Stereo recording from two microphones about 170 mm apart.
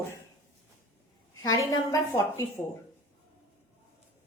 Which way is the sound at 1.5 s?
20° left (ahead or behind).